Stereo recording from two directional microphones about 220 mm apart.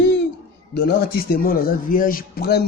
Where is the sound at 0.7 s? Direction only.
45° left (ahead or behind).